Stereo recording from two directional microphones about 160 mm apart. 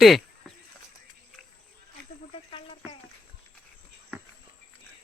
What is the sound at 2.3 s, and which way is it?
Cricket, 35° left (ahead or behind).